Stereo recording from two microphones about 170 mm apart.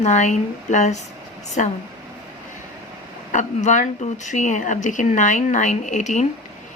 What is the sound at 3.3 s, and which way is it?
Speech, 45° left (ahead or behind).